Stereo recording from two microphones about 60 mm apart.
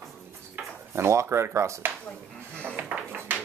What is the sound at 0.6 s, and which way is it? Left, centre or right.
Drawer open or close, right.